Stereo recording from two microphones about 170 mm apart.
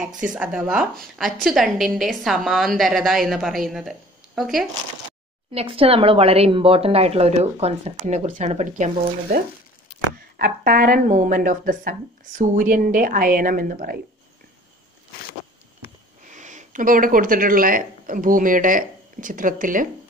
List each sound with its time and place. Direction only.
0.2 s a woman's voice: 5° right (ahead or behind)
5.5 s speech: 35° right (ahead or behind)
10.3 s speech: 55° right (ahead or behind)
16.3 s speech: 45° right (ahead or behind)